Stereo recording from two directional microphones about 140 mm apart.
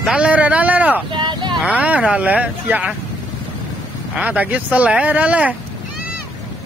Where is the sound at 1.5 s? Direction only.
10° right (ahead or behind).